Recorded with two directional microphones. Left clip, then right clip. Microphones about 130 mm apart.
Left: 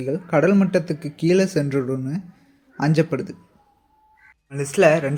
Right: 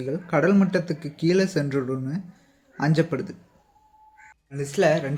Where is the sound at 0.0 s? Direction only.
10° left (ahead or behind).